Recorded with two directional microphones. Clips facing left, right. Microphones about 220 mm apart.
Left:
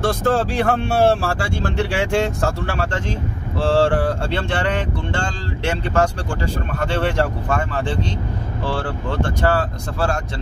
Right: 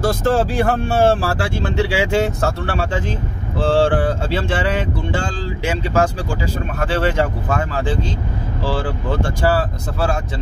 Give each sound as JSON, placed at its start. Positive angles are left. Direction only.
{"t": 0.0, "sound": "speech", "side_deg": 0}